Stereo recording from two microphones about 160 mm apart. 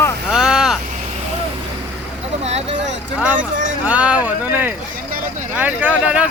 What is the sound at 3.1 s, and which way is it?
Speech, 10° right (ahead or behind).